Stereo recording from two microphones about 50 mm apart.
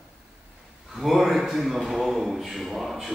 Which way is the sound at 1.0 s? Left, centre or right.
Centre.